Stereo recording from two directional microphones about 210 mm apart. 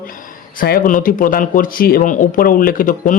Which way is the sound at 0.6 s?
40° left (ahead or behind).